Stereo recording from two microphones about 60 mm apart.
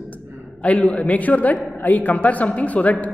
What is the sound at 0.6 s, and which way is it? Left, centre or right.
Speech, left.